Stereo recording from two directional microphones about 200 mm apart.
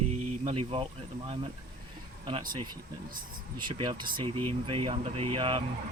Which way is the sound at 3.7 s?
25° right (ahead or behind).